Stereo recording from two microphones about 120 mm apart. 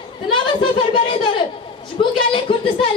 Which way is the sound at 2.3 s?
45° left (ahead or behind).